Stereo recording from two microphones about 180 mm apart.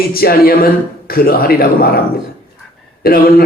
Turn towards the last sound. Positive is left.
turn(degrees=55)  # may be behind; listen again after turning